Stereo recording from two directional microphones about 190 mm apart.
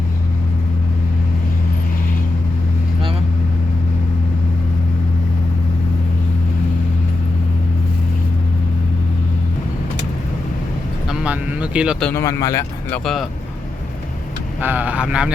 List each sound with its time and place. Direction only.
11.1 s a sound: 5° right (ahead or behind)
12.0 s speech: 15° left (ahead or behind)
14.6 s speech: 10° right (ahead or behind)